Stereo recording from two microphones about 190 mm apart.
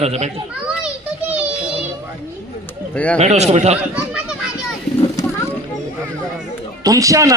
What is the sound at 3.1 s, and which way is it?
Speech, 35° right (ahead or behind).